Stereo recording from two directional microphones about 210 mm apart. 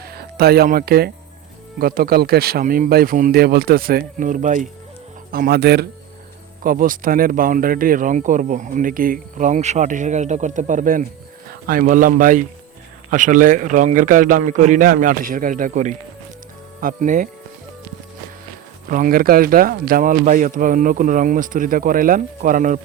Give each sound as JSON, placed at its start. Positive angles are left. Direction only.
{"t": 0.0, "sound": "speech", "side_deg": -50}
{"t": 5.3, "sound": "speech", "side_deg": -45}
{"t": 18.9, "sound": "speech", "side_deg": -40}